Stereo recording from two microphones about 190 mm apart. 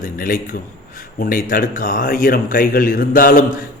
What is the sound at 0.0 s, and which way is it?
Speech, 45° left (ahead or behind).